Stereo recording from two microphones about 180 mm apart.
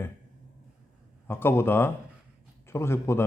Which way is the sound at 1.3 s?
10° left (ahead or behind).